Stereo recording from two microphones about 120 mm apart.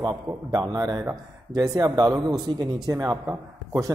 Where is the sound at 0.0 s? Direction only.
35° right (ahead or behind).